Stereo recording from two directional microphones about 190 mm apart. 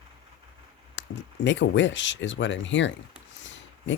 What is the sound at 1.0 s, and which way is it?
Speech, 70° left (ahead or behind).